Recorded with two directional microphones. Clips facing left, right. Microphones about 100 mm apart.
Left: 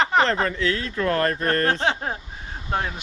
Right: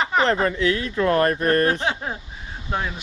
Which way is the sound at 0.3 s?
15° right (ahead or behind).